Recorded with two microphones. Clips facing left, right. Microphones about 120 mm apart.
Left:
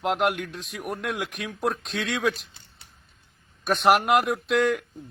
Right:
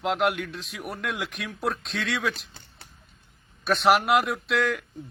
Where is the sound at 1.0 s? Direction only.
10° left (ahead or behind).